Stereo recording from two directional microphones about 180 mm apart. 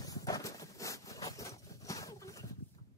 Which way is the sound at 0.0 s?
20° left (ahead or behind).